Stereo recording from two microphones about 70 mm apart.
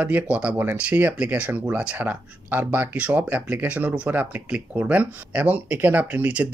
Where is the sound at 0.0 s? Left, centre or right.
Centre.